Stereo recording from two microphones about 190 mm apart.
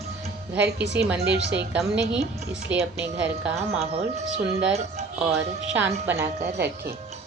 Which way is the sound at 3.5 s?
35° right (ahead or behind).